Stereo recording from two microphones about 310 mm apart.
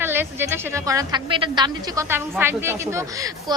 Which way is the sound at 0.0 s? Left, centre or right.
Centre.